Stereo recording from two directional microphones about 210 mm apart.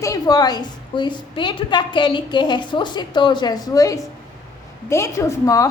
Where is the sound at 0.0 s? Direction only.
15° left (ahead or behind).